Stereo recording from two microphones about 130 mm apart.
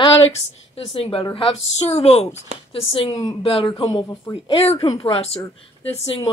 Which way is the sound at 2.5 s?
60° right (ahead or behind).